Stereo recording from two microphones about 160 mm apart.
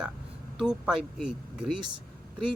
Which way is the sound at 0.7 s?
5° right (ahead or behind).